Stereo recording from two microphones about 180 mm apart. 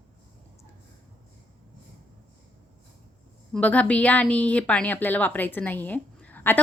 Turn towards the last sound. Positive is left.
turn(degrees=10)  # may be behind; listen again after turning